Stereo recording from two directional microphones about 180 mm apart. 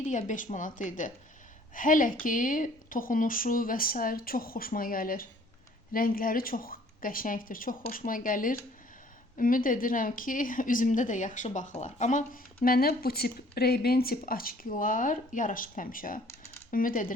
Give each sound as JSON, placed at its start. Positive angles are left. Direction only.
{"t": 0.0, "sound": "a woman's voice", "side_deg": 45}